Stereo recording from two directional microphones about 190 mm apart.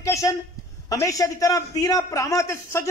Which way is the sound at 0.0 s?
15° left (ahead or behind).